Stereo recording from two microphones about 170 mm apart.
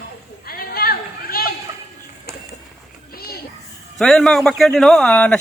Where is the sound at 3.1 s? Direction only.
65° left (ahead or behind).